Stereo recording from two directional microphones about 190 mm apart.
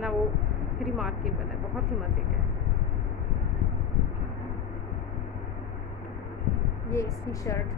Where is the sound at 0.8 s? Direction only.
Centre (ahead or behind).